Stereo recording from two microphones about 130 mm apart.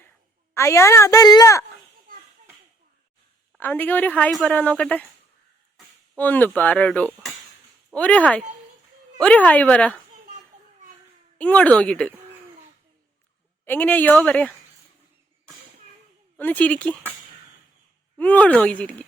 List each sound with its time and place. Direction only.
0.5 s a woman's voice: 20° left (ahead or behind)
3.6 s speech: 15° left (ahead or behind)
6.1 s speech: 15° left (ahead or behind)
11.3 s speech: 10° left (ahead or behind)
13.7 s speech: 15° left (ahead or behind)
16.4 s speech: 10° left (ahead or behind)
18.2 s speech: 10° left (ahead or behind)